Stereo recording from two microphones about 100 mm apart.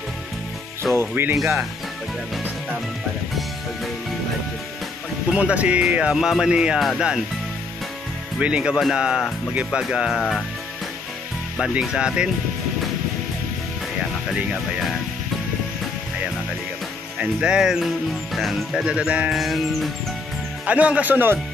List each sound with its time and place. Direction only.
0.9 s speech: 20° right (ahead or behind)
5.3 s speech: 15° right (ahead or behind)
8.4 s speech: 10° right (ahead or behind)
11.5 s speech: 5° right (ahead or behind)
17.2 s speech: 10° right (ahead or behind)
19.4 s speech: centre (ahead or behind)
20.6 s speech: 15° right (ahead or behind)